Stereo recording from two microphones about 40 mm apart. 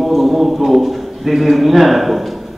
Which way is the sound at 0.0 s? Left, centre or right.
Centre.